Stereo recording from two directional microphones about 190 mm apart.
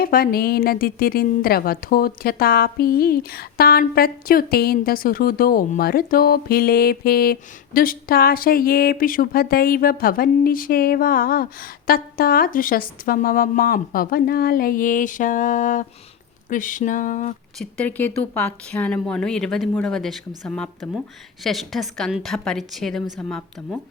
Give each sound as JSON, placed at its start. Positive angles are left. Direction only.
{"t": 0.0, "sound": "a woman's voice", "side_deg": 50}
{"t": 17.6, "sound": "speech", "side_deg": 5}